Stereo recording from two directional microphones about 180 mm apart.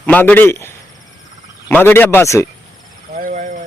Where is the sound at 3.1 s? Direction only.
45° right (ahead or behind).